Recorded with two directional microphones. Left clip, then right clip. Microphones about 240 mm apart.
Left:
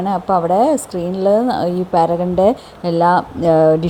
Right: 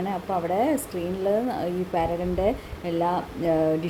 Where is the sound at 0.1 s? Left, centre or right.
Left.